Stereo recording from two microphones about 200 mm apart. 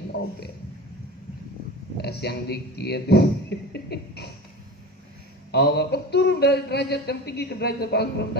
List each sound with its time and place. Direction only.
2.0 s speech: 55° left (ahead or behind)
5.5 s a man's voice: 55° left (ahead or behind)